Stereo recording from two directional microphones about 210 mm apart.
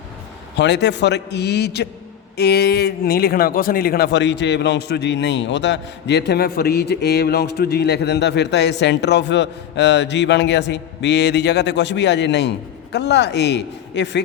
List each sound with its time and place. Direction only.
0.5 s a man's voice: 55° left (ahead or behind)